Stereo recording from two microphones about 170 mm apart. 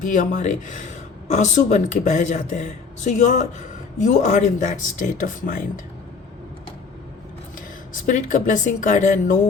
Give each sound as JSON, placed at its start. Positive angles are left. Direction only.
{"t": 0.0, "sound": "speech", "side_deg": 50}
{"t": 8.0, "sound": "speech", "side_deg": 50}